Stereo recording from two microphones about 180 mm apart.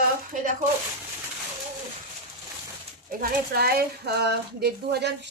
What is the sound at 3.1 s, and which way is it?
Speech, 55° right (ahead or behind).